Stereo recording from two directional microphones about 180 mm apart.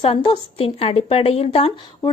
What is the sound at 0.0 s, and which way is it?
A woman's voice, 30° left (ahead or behind).